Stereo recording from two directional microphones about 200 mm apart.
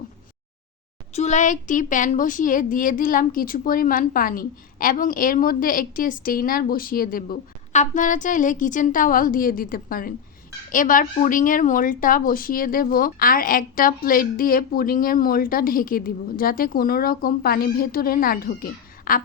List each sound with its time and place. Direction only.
1.1 s a woman's voice: 35° left (ahead or behind)